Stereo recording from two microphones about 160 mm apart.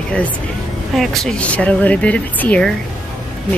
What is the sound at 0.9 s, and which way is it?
A woman's voice, centre (ahead or behind).